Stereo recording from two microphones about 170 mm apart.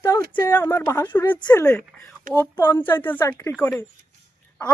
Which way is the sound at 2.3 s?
50° right (ahead or behind).